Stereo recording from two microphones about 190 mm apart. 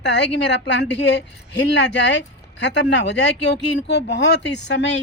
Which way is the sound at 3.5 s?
65° left (ahead or behind).